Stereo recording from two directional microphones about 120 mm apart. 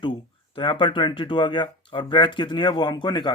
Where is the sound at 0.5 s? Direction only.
45° left (ahead or behind).